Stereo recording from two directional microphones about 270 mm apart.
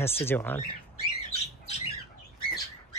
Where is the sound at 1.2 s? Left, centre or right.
Left.